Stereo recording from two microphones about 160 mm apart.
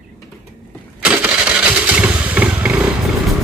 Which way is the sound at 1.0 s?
10° right (ahead or behind).